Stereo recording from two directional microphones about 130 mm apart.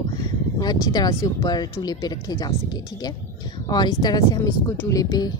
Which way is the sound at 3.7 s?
30° left (ahead or behind).